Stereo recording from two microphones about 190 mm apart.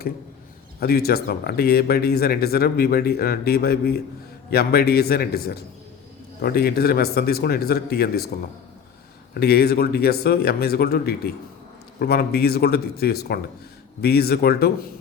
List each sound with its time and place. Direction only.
0.8 s speech: 55° left (ahead or behind)
9.3 s speech: 55° left (ahead or behind)